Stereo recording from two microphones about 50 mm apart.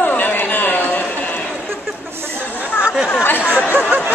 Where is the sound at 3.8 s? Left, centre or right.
Right.